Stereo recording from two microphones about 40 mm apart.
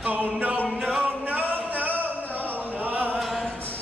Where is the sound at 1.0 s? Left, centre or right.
Right.